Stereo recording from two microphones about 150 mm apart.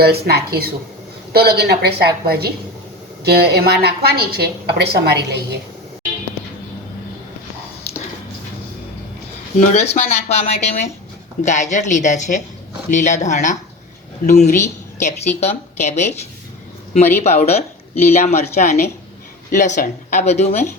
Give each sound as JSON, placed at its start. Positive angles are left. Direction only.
{"t": 0.0, "sound": "a woman's voice", "side_deg": -90}
{"t": 9.6, "sound": "a woman's voice", "side_deg": 45}
{"t": 17.2, "sound": "a woman's voice", "side_deg": 45}